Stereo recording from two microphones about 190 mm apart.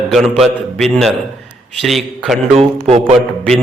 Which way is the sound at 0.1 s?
Centre (ahead or behind).